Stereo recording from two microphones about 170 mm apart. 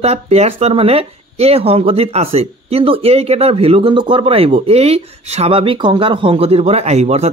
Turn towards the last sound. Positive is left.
turn(degrees=-40)  # may be behind; listen again after turning